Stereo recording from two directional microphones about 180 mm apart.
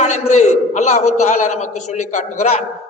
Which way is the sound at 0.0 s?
40° left (ahead or behind).